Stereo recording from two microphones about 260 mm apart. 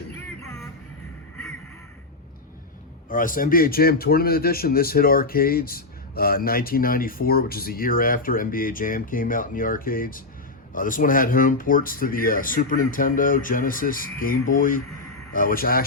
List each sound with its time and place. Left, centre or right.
3.1 s speech: left